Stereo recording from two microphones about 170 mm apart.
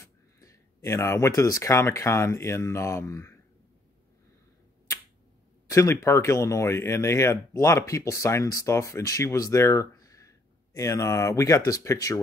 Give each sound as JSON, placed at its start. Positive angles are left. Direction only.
{"t": 0.0, "sound": "speech", "side_deg": 20}
{"t": 5.7, "sound": "speech", "side_deg": 20}